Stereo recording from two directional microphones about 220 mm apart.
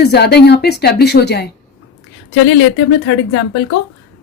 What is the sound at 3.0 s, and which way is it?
Speech, 65° left (ahead or behind).